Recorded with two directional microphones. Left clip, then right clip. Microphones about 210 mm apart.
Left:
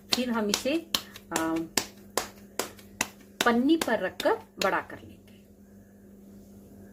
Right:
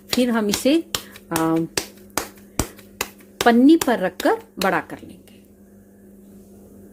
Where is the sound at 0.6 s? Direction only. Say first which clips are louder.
Right 13 dB; 45° right (ahead or behind).